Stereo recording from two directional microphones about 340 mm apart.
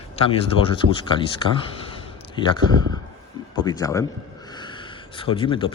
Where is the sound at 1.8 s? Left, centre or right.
Centre.